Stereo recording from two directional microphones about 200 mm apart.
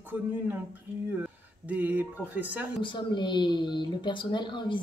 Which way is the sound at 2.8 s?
25° left (ahead or behind).